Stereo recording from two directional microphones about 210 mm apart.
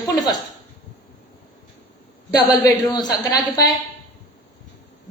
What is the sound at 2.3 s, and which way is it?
A woman's voice, 15° left (ahead or behind).